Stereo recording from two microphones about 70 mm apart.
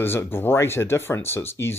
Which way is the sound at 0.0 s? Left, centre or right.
Left.